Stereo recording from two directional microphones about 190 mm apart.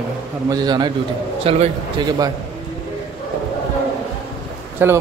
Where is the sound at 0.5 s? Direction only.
20° right (ahead or behind).